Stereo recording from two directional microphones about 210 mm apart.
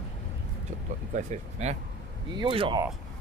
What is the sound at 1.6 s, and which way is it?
Speech, 30° right (ahead or behind).